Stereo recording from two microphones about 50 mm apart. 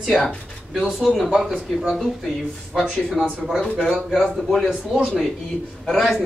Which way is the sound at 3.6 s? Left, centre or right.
Centre.